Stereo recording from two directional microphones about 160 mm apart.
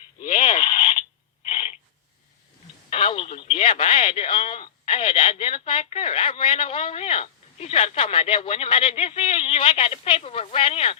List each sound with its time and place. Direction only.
0.3 s radio: 35° left (ahead or behind)
1.5 s a sound: 40° left (ahead or behind)
2.9 s radio: 35° left (ahead or behind)